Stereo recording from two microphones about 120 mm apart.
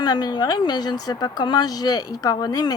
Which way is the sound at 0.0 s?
35° left (ahead or behind).